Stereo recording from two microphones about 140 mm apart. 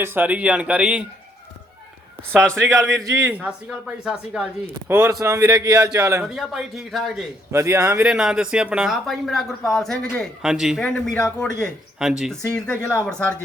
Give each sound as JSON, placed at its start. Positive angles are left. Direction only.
{"t": 0.0, "sound": "speech", "side_deg": -15}
{"t": 3.0, "sound": "speech", "side_deg": -25}
{"t": 3.2, "sound": "speech", "side_deg": -10}
{"t": 4.9, "sound": "speech", "side_deg": -20}
{"t": 6.2, "sound": "speech", "side_deg": 0}
{"t": 7.5, "sound": "speech", "side_deg": -20}
{"t": 8.0, "sound": "a man's voice", "side_deg": -5}
{"t": 11.9, "sound": "a man's voice", "side_deg": -5}